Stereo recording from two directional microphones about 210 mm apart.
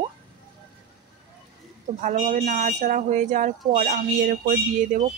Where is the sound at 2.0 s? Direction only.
35° right (ahead or behind).